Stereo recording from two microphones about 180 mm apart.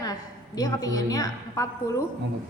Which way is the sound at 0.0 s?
20° left (ahead or behind).